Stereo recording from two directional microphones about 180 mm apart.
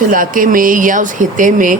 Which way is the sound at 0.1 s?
50° right (ahead or behind).